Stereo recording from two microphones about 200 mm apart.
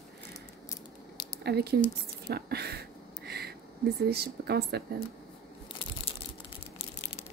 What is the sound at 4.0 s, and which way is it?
Speech, 55° right (ahead or behind).